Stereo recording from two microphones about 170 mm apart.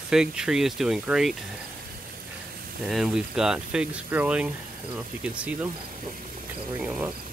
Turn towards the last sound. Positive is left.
turn(degrees=-5)  # may be behind; listen again after turning